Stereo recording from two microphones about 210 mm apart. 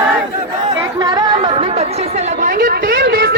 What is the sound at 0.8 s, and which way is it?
Chatter, 20° right (ahead or behind).